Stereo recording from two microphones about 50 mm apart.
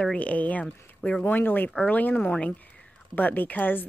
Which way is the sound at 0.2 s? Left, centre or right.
Left.